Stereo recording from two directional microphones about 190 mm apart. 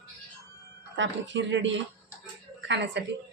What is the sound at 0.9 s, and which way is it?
Speech, 70° right (ahead or behind).